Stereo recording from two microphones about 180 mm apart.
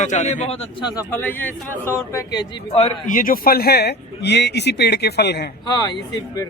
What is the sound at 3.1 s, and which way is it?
A man's voice, 50° left (ahead or behind).